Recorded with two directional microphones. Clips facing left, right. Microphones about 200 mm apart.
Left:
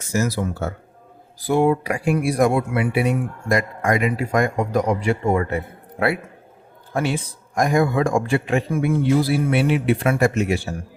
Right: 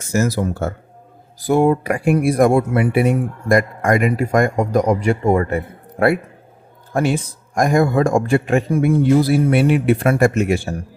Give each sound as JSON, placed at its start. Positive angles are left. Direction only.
{"t": 0.1, "sound": "a man's voice", "side_deg": -45}